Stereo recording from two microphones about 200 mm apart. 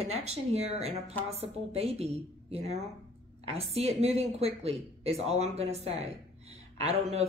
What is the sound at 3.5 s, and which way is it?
Speech, 30° right (ahead or behind).